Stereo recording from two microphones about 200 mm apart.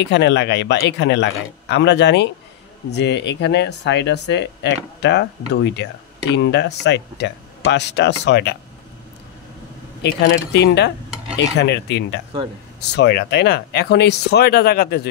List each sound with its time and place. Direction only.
0.0 s speech: 60° left (ahead or behind)
10.0 s speech: 55° left (ahead or behind)